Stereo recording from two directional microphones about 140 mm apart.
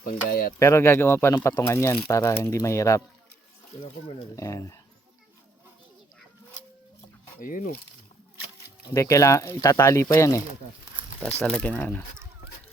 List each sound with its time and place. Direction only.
0.0 s speech: 90° left
0.6 s speech: 20° left (ahead or behind)
4.4 s speech: 20° left (ahead or behind)
7.3 s speech: 80° left
8.9 s speech: 25° left (ahead or behind)
11.6 s speech: 10° left (ahead or behind)